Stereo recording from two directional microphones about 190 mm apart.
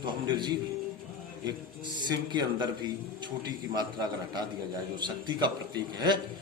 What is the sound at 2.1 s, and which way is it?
A man's voice, 20° right (ahead or behind).